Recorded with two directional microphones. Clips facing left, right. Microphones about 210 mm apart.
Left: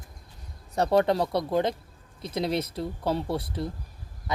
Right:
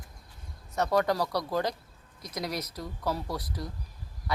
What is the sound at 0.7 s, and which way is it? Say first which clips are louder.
Speech: left 4 dB; 30° left (ahead or behind).